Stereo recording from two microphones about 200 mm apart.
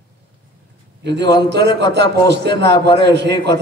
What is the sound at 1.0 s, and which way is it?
A man's voice, 60° right (ahead or behind).